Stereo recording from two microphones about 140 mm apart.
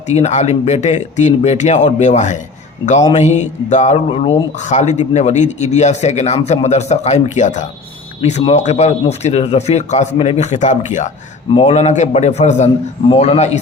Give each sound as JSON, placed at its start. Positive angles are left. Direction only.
{"t": 0.1, "sound": "a man's voice", "side_deg": 50}
{"t": 11.5, "sound": "a man's voice", "side_deg": 45}